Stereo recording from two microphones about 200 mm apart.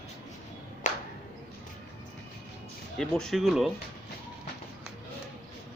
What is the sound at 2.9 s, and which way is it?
Speech, 5° left (ahead or behind).